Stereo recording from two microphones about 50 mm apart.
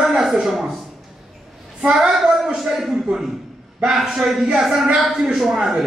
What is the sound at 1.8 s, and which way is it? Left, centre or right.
A woman's voice, centre.